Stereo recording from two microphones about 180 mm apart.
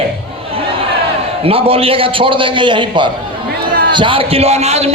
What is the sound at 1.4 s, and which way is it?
A man's voice, 30° right (ahead or behind).